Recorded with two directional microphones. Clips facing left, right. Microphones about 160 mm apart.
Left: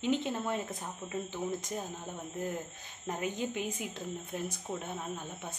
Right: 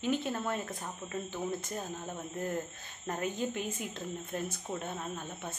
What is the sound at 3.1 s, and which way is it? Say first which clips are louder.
Speech: right 1 dB; 15° left (ahead or behind).